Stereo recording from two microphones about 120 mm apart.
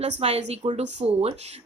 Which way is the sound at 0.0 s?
65° right (ahead or behind).